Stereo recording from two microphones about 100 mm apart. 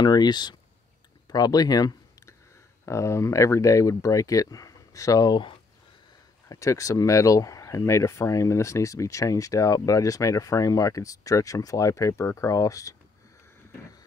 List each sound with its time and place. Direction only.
0.0 s speech: 45° left (ahead or behind)
1.2 s a sound: 40° left (ahead or behind)
2.8 s speech: 30° left (ahead or behind)
6.5 s speech: 35° left (ahead or behind)